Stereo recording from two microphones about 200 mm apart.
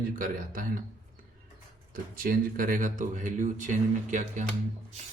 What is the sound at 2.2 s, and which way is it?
Speech, 45° right (ahead or behind).